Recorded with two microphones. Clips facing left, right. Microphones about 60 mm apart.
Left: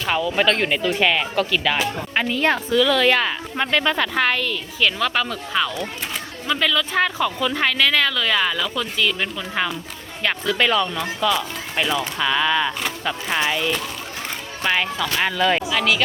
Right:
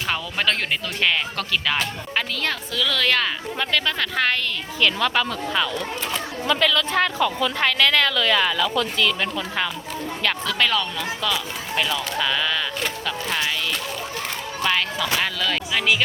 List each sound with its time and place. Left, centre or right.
0.1 s speech: centre
2.1 s a woman's voice: centre
15.7 s a woman's voice: centre